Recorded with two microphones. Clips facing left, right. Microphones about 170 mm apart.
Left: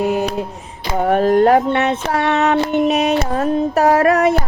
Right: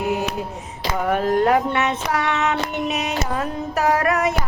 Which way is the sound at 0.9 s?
35° left (ahead or behind).